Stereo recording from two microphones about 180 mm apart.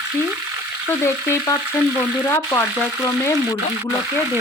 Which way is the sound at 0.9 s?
15° left (ahead or behind).